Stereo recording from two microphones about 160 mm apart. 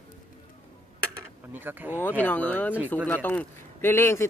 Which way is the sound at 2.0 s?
10° left (ahead or behind).